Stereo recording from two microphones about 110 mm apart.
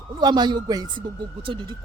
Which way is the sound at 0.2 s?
40° right (ahead or behind).